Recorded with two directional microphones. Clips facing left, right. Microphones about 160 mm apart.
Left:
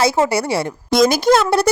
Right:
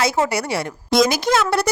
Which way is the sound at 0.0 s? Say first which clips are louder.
Left 4 dB; 30° left (ahead or behind).